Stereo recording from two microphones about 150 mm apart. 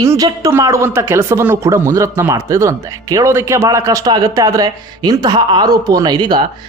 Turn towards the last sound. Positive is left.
turn(degrees=-30)  # may be behind; listen again after turning